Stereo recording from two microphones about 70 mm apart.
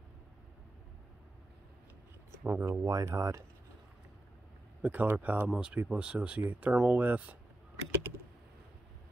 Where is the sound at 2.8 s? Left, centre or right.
Right.